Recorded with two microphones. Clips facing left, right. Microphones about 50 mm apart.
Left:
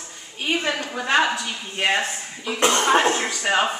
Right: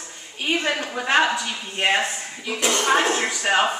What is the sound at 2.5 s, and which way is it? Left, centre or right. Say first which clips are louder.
Speech: left 3 dB; left.